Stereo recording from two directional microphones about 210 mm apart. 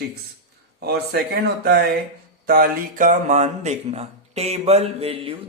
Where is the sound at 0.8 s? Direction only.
50° right (ahead or behind).